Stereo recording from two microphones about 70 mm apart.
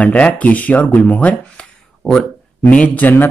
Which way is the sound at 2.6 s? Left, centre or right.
Left.